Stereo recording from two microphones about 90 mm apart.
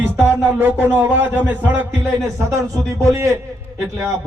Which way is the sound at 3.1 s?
35° right (ahead or behind).